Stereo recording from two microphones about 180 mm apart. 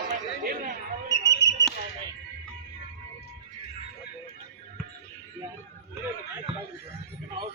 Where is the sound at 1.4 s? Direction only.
85° left.